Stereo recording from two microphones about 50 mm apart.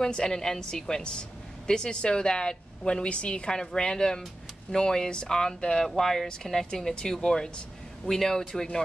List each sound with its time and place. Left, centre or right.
0.0 s a woman's voice: centre